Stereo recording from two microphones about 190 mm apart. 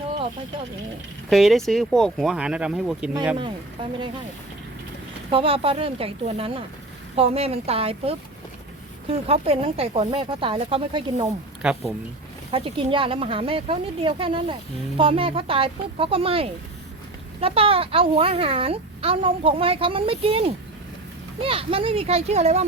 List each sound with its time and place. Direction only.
1.3 s speech: centre (ahead or behind)
5.3 s speech: 30° right (ahead or behind)
11.6 s speech: 5° right (ahead or behind)
12.5 s speech: 30° right (ahead or behind)
21.4 s speech: 30° right (ahead or behind)